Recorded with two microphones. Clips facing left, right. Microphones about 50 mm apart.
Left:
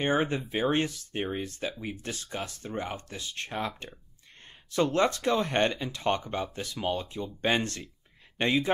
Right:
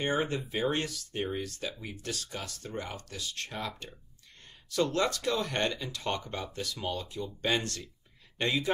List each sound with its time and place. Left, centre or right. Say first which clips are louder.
0.2 s speech: left 2 dB; left